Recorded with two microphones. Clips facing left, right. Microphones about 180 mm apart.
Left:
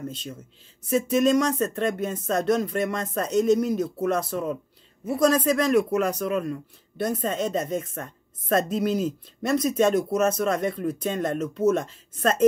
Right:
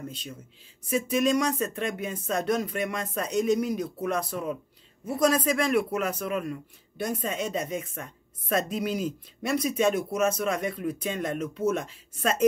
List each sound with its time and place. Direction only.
0.8 s speech: 10° right (ahead or behind)